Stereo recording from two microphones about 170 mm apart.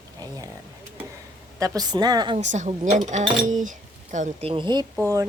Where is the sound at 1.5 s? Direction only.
20° right (ahead or behind).